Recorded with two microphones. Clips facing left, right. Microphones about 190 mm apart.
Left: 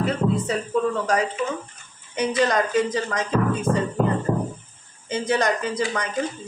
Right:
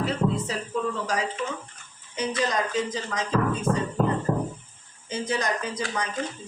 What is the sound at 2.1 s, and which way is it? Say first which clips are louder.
Speech: left 5 dB; 65° left (ahead or behind).